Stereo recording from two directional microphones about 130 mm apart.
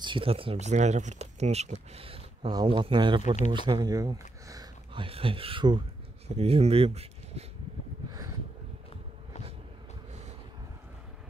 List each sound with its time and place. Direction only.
0.0 s speech: 40° right (ahead or behind)
4.9 s speech: 45° right (ahead or behind)
6.2 s speech: 50° right (ahead or behind)